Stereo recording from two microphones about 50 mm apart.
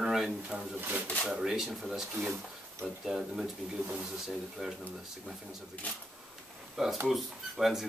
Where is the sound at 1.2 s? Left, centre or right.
Centre.